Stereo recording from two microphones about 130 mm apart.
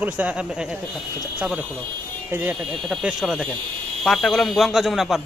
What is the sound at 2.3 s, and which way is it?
Speech, 15° right (ahead or behind).